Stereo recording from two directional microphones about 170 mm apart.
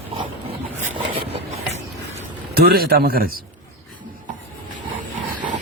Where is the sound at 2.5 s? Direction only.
65° right (ahead or behind).